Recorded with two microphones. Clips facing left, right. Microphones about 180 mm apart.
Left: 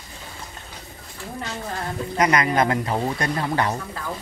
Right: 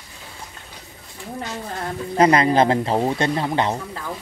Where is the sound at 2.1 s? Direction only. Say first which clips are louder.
Right 5 dB; 30° right (ahead or behind).